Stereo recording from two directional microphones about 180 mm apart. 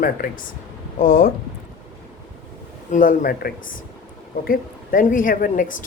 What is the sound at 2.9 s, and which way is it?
Speech, 50° left (ahead or behind).